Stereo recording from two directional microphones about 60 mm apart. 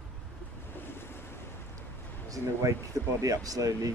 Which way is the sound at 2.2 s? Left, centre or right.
Right.